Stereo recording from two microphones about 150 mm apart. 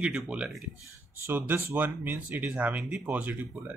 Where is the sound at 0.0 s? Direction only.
5° right (ahead or behind).